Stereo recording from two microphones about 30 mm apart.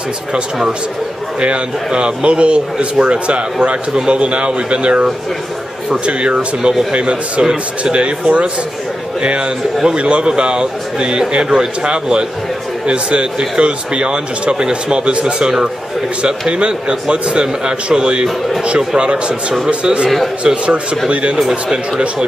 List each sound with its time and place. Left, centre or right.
1.9 s a man's voice: right
21.4 s a man's voice: centre